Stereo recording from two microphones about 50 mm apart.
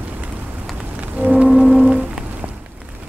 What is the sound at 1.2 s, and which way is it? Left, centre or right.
Music, right.